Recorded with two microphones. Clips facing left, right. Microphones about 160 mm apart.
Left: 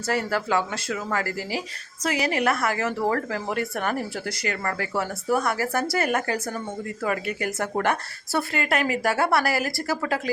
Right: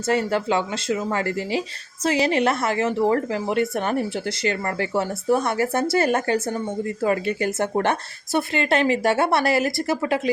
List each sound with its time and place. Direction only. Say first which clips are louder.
0.1 s a woman's voice: right 3 dB; 25° right (ahead or behind)